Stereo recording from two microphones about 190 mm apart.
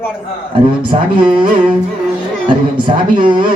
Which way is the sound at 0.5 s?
25° right (ahead or behind).